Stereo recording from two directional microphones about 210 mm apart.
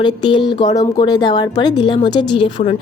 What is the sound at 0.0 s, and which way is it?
Speech, 20° left (ahead or behind).